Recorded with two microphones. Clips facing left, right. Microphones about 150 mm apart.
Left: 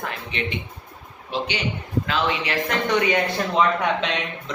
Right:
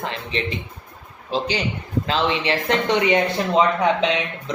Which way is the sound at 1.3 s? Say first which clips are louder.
Right 3 dB; 35° right (ahead or behind).